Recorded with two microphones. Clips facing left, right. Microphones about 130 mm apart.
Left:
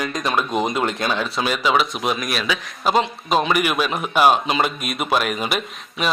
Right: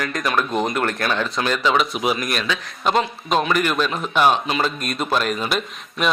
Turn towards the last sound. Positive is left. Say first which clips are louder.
# right 2 dB
turn(degrees=5)  # may be behind; listen again after turning